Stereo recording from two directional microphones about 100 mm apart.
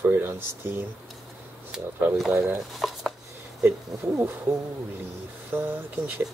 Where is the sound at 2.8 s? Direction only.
Centre (ahead or behind).